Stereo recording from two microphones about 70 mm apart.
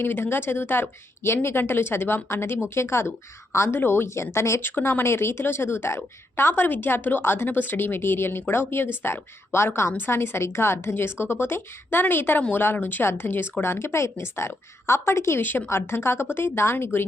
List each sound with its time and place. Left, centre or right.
0.0 s a woman's voice: left
4.7 s a woman's voice: left